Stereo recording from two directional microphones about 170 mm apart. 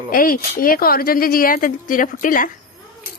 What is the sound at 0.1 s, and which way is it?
Speech, 55° left (ahead or behind).